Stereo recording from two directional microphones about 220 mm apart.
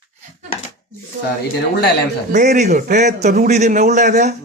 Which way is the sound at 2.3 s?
35° right (ahead or behind).